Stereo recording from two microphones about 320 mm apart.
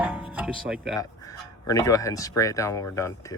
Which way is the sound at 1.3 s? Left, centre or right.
Centre.